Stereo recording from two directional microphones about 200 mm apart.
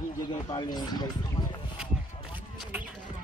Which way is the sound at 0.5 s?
20° left (ahead or behind).